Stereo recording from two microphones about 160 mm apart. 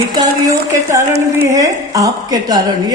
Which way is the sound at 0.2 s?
20° right (ahead or behind).